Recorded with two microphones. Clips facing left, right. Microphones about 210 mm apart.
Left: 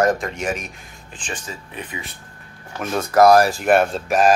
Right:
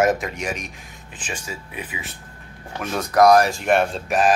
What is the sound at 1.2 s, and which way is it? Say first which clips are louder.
Speech: even; 10° right (ahead or behind).